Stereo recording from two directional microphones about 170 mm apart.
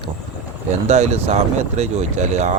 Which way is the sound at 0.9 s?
40° right (ahead or behind).